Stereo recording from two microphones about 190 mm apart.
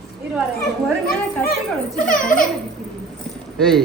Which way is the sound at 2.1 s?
45° left (ahead or behind).